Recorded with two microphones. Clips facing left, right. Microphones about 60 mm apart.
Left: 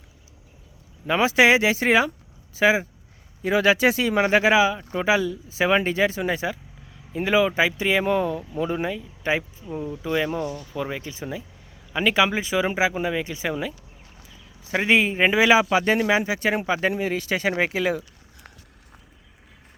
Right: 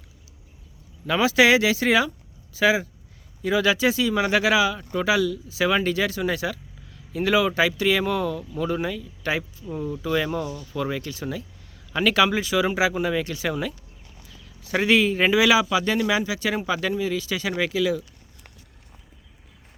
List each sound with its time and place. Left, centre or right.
1.0 s speech: left
10.4 s speech: left
10.7 s speech: centre
14.3 s a sound: centre
14.8 s speech: left
16.9 s speech: left